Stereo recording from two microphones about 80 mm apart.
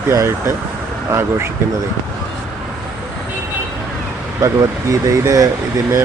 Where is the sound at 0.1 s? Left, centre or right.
Right.